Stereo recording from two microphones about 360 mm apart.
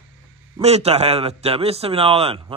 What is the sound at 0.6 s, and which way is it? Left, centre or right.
A man's voice, centre.